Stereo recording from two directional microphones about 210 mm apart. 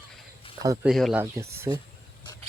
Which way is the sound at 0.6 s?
15° right (ahead or behind).